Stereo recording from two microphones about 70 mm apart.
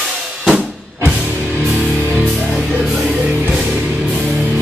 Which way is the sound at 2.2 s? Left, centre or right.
Centre.